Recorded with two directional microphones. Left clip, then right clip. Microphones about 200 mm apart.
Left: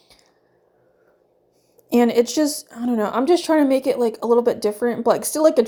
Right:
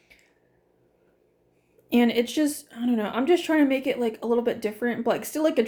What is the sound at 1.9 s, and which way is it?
A woman's voice, 25° left (ahead or behind).